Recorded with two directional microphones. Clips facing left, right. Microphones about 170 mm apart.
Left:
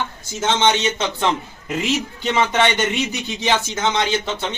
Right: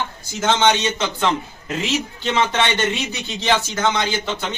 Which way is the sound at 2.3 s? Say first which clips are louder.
Left 2 dB; 15° left (ahead or behind).